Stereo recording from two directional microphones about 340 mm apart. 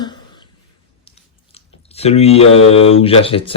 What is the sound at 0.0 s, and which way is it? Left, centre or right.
Cough, centre.